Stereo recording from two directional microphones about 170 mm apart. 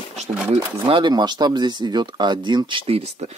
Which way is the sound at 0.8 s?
30° right (ahead or behind).